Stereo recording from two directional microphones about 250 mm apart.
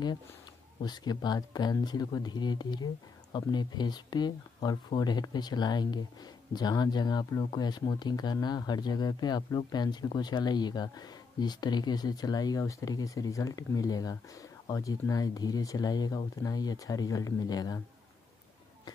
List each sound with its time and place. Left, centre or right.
0.8 s speech: centre